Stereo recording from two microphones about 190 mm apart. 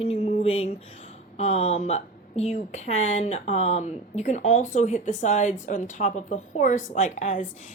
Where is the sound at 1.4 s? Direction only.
35° left (ahead or behind).